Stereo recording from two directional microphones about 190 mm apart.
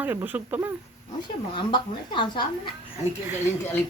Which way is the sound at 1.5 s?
25° left (ahead or behind).